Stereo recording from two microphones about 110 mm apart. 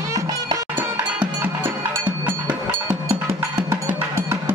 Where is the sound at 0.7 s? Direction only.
15° right (ahead or behind).